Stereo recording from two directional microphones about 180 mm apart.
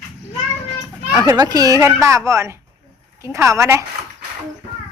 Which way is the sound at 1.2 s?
20° right (ahead or behind).